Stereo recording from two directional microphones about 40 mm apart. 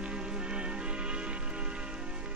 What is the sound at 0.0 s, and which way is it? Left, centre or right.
Music, right.